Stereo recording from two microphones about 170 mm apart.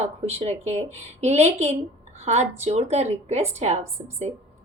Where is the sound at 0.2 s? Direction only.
40° right (ahead or behind).